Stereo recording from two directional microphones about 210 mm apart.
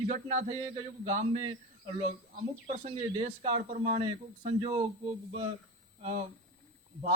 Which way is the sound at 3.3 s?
30° right (ahead or behind).